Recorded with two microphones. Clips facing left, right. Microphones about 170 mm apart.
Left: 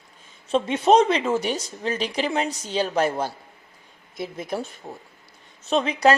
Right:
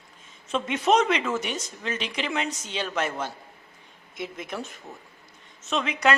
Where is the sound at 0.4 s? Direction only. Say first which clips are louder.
Left 5 dB; 30° left (ahead or behind).